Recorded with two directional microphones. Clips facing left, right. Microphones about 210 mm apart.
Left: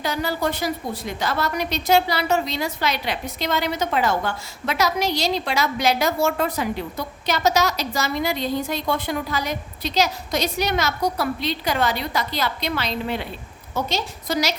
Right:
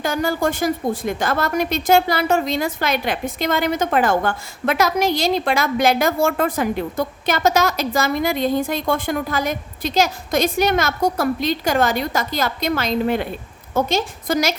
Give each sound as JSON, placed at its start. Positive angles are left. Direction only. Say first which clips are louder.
{"t": 0.0, "sound": "a woman's voice", "louder": "right 4 dB", "side_deg": -50}